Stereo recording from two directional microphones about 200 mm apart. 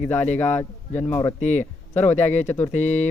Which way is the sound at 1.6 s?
10° left (ahead or behind).